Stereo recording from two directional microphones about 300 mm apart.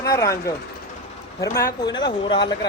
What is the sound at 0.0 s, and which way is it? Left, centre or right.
Speech, centre.